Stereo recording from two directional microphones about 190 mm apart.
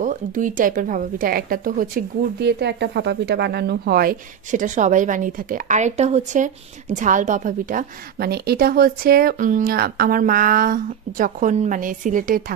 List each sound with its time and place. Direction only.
0.0 s speech: 45° right (ahead or behind)